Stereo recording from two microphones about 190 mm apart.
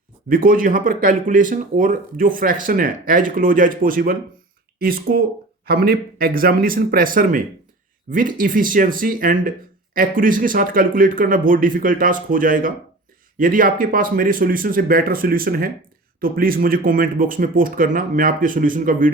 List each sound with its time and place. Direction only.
0.3 s speech: 45° right (ahead or behind)